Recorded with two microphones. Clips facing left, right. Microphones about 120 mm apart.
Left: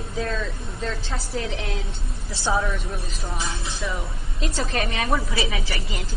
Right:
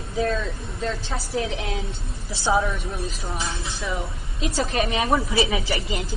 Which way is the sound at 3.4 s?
Centre (ahead or behind).